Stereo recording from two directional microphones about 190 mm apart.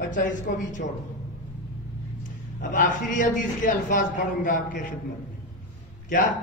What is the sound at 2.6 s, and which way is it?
A man's voice, 45° left (ahead or behind).